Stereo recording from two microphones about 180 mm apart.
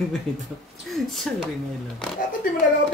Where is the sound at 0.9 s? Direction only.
Centre (ahead or behind).